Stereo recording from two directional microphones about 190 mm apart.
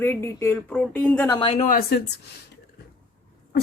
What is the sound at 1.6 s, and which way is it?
Speech, 45° left (ahead or behind).